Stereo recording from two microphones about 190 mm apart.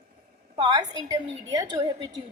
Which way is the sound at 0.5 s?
25° right (ahead or behind).